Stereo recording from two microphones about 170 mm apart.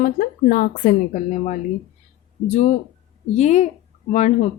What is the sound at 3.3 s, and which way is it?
A woman's voice, 40° left (ahead or behind).